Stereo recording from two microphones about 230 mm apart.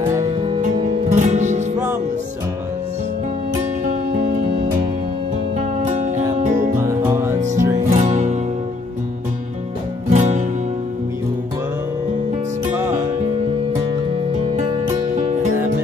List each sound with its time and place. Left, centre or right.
1.1 s music: right
3.8 s music: right
5.6 s music: right
6.9 s music: centre
7.9 s music: right
10.0 s music: right